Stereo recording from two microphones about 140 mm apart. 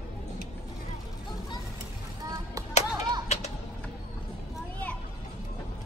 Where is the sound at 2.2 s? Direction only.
25° right (ahead or behind).